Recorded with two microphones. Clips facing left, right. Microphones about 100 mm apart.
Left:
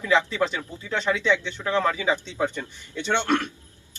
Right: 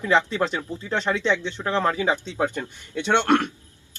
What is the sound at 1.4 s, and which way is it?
Speech, 35° right (ahead or behind).